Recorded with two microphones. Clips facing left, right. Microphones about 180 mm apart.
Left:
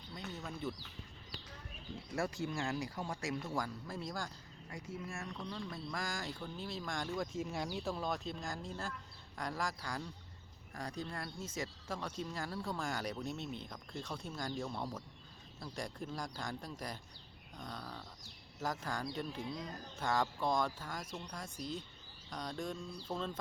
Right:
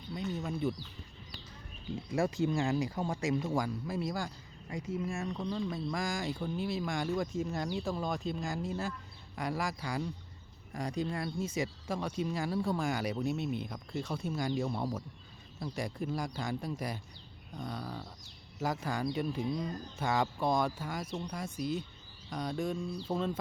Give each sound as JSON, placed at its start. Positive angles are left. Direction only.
{"t": 0.1, "sound": "a sound", "side_deg": -15}
{"t": 2.1, "sound": "speech", "side_deg": -20}
{"t": 7.3, "sound": "speech", "side_deg": 5}